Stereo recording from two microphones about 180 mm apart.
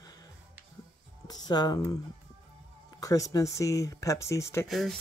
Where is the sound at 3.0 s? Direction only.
20° left (ahead or behind).